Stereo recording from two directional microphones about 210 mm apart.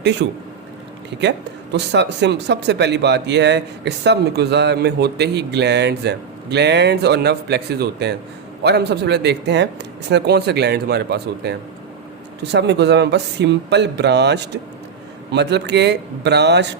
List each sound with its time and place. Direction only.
0.0 s a man's voice: 55° right (ahead or behind)
1.7 s speech: 55° right (ahead or behind)